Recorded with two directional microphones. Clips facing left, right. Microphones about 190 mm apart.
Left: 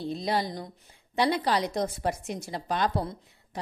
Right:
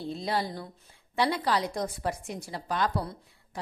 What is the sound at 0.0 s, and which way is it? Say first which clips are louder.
A woman's voice: left 2 dB; 15° left (ahead or behind).